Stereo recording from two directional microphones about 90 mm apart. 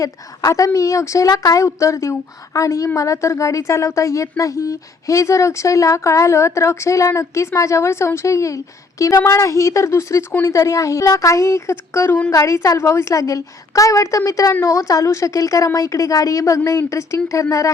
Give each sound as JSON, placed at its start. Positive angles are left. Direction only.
{"t": 0.0, "sound": "a woman's voice", "side_deg": 40}